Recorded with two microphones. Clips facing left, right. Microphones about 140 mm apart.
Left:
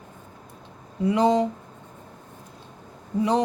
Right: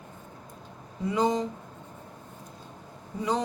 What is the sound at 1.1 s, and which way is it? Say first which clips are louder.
Speech: left 6 dB; 65° left (ahead or behind).